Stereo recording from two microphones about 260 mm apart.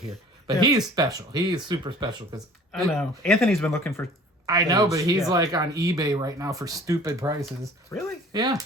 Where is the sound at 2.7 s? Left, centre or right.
Centre.